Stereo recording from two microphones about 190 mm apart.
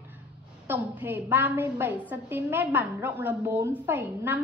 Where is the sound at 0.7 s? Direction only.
10° right (ahead or behind).